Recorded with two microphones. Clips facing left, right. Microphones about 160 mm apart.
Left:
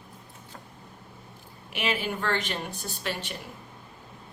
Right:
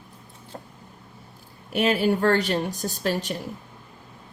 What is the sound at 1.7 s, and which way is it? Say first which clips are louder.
Speech: right 9 dB; 40° right (ahead or behind).